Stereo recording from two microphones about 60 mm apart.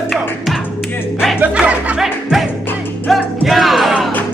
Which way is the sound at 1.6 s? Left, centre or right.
Right.